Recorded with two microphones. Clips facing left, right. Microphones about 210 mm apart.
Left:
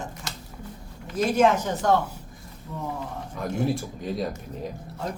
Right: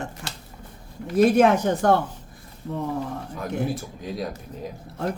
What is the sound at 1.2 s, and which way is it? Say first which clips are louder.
Speech: right 4 dB; 60° right (ahead or behind).